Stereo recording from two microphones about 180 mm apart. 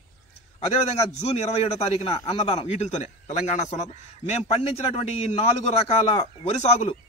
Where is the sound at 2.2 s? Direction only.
35° left (ahead or behind).